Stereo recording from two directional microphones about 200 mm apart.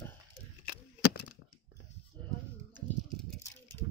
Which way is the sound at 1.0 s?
50° left (ahead or behind).